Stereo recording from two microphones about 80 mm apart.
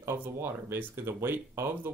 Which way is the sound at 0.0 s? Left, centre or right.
Right.